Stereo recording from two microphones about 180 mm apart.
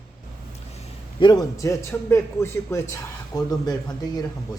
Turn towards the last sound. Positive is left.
turn(degrees=20)  # may be behind; listen again after turning